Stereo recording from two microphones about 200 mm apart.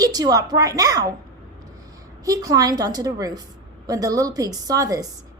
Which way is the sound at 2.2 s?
15° right (ahead or behind).